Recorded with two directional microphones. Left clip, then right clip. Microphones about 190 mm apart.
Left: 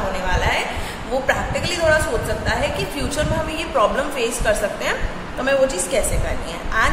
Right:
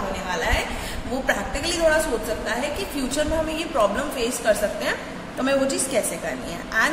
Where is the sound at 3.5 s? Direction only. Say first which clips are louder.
Left 6 dB; 15° right (ahead or behind).